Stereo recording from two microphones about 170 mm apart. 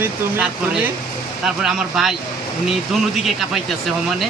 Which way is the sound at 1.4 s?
Centre (ahead or behind).